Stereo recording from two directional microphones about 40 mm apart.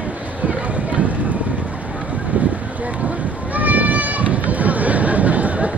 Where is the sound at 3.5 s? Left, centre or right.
Right.